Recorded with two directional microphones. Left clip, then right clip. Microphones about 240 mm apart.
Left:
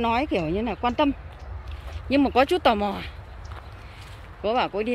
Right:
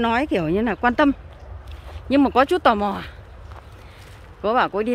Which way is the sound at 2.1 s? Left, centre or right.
Centre.